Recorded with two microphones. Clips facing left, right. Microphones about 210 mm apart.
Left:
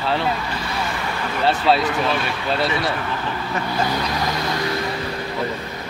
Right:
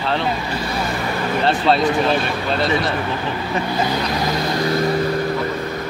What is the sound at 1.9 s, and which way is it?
Speech, 35° right (ahead or behind).